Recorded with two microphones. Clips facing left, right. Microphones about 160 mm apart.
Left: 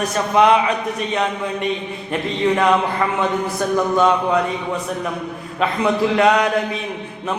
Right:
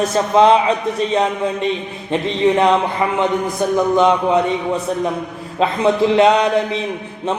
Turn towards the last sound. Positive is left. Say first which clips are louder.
# right 3 dB
turn(degrees=-25)  # may be behind; listen again after turning